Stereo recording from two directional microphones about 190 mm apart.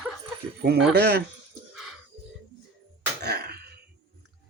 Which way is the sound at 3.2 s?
55° right (ahead or behind).